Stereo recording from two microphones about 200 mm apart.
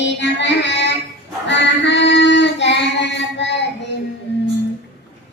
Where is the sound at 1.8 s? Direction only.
60° left (ahead or behind).